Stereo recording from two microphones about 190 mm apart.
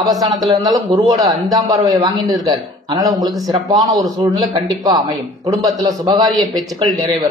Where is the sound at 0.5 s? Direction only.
20° right (ahead or behind).